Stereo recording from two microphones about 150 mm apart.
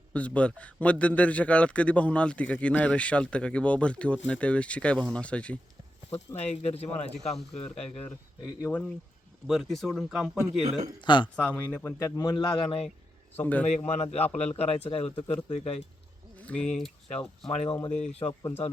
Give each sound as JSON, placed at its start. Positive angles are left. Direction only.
{"t": 0.1, "sound": "a man's voice", "side_deg": 10}
{"t": 6.1, "sound": "speech", "side_deg": 45}
{"t": 8.7, "sound": "speech", "side_deg": 0}
{"t": 10.6, "sound": "a man's voice", "side_deg": -45}
{"t": 11.0, "sound": "speech", "side_deg": 30}
{"t": 11.3, "sound": "a man's voice", "side_deg": 10}
{"t": 11.9, "sound": "a man's voice", "side_deg": 20}
{"t": 13.3, "sound": "a man's voice", "side_deg": 10}
{"t": 13.7, "sound": "speech", "side_deg": 45}
{"t": 16.5, "sound": "speech", "side_deg": 5}
{"t": 17.5, "sound": "speech", "side_deg": 45}